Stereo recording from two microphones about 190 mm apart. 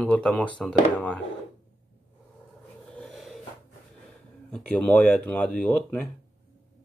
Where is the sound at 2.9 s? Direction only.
Centre (ahead or behind).